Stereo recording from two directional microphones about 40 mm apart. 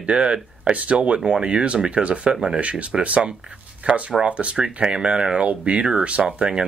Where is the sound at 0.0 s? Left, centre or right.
Right.